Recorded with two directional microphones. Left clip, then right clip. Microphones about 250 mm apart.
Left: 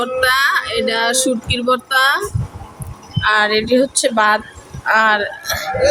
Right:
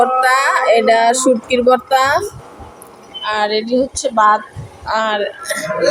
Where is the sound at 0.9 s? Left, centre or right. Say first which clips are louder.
Right 5 dB; centre.